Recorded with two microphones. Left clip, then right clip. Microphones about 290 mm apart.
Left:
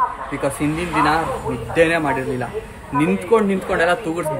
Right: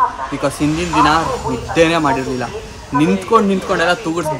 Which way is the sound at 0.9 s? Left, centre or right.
Centre.